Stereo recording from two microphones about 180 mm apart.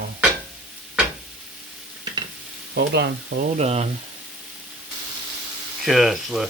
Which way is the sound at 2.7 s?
70° right (ahead or behind).